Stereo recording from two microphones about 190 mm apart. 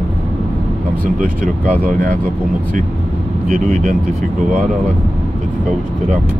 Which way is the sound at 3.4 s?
35° right (ahead or behind).